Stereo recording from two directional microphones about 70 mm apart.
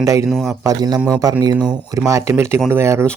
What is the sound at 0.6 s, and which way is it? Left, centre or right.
Speech, right.